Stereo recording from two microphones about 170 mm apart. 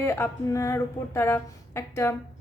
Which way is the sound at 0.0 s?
15° left (ahead or behind).